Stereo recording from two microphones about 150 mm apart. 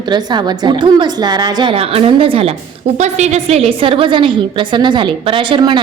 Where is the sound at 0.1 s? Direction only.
30° right (ahead or behind).